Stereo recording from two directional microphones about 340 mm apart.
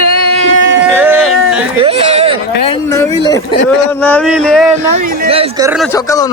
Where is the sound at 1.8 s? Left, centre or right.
Centre.